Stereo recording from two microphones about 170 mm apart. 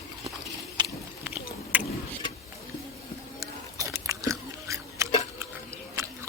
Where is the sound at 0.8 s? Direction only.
25° right (ahead or behind).